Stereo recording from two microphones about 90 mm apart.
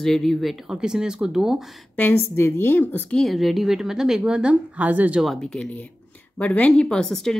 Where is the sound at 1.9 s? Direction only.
25° left (ahead or behind).